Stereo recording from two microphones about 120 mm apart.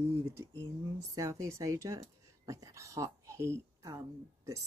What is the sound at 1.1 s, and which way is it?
Speech, 25° right (ahead or behind).